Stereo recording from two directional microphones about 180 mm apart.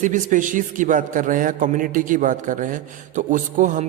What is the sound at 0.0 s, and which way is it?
A man's voice, 45° right (ahead or behind).